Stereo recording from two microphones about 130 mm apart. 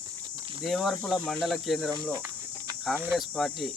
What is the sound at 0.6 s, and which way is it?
Cricket, centre (ahead or behind).